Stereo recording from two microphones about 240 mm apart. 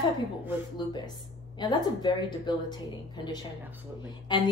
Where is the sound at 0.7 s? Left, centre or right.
Centre.